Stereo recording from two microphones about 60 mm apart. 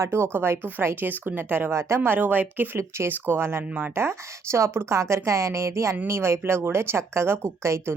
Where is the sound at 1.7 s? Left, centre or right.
Right.